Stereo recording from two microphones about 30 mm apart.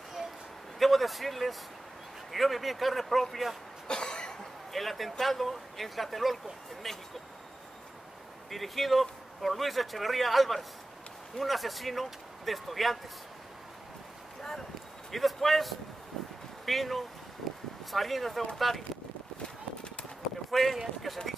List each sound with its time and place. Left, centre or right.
0.7 s speech: centre
3.8 s cough: left
4.7 s speech: centre
8.5 s speech: centre
15.0 s speech: centre
17.4 s a sound: centre
17.9 s speech: centre
20.5 s speech: centre